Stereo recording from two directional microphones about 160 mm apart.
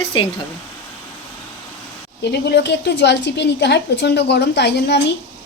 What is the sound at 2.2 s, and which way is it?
A woman's voice, 90° left.